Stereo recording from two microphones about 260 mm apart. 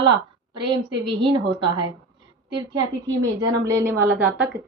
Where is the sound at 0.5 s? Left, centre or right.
Centre.